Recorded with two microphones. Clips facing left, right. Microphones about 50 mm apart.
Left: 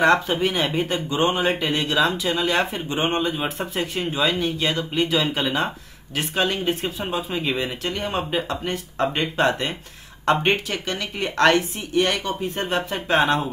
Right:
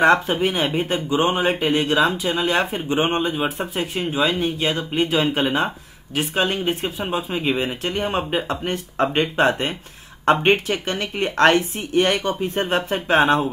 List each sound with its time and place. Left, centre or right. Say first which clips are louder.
0.4 s speech: right 1 dB; right
5.0 s speech: right 3 dB; right